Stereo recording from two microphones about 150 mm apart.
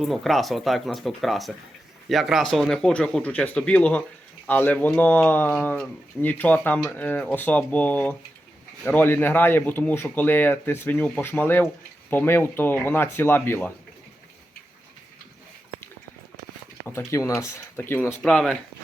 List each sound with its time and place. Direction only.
0.0 s speech: centre (ahead or behind)
17.1 s speech: 20° left (ahead or behind)
18.2 s speech: 5° left (ahead or behind)